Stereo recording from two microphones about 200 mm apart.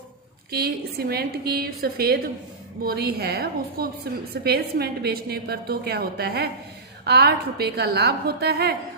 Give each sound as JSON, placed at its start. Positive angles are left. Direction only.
{"t": 0.5, "sound": "a woman's voice", "side_deg": -50}